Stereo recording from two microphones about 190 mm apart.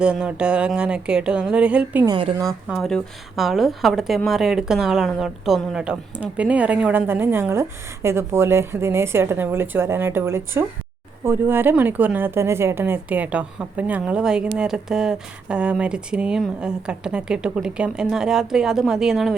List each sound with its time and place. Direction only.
0.0 s speech: 5° right (ahead or behind)
2.0 s a woman's voice: 25° right (ahead or behind)
2.6 s speech: centre (ahead or behind)